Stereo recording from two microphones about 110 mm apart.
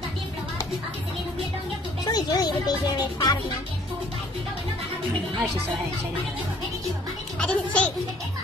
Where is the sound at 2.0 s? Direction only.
40° left (ahead or behind).